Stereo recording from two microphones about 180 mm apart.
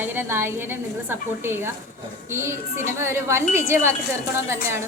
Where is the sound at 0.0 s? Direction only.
10° right (ahead or behind).